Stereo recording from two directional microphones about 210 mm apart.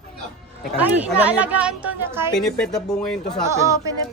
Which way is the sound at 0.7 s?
5° right (ahead or behind).